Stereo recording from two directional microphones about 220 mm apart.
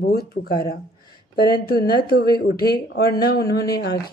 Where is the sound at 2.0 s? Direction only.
45° left (ahead or behind).